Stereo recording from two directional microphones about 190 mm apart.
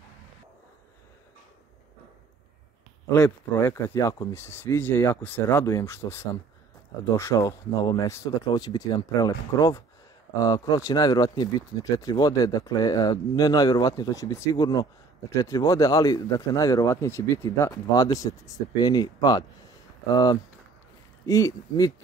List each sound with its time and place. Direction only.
3.1 s speech: 15° left (ahead or behind)